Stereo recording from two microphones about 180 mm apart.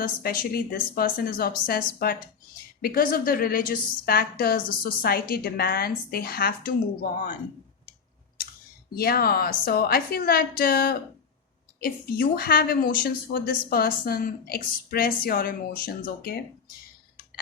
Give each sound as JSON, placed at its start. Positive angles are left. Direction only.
{"t": 0.0, "sound": "a woman's voice", "side_deg": 55}
{"t": 9.0, "sound": "a woman's voice", "side_deg": 60}